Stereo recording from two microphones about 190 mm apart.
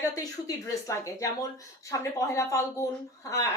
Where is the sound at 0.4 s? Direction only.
15° left (ahead or behind).